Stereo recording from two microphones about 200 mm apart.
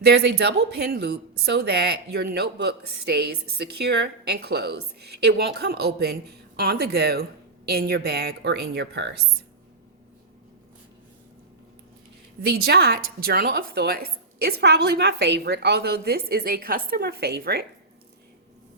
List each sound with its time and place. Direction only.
0.0 s a woman's voice: 55° right (ahead or behind)
12.4 s a woman's voice: 55° right (ahead or behind)